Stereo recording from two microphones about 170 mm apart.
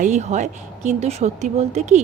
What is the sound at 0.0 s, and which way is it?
Speech, 45° right (ahead or behind).